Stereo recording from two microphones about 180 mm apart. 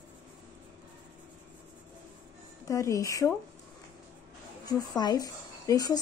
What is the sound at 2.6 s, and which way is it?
Speech, 20° left (ahead or behind).